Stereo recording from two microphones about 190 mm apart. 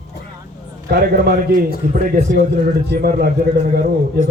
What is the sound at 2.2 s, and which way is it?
Speech, 40° right (ahead or behind).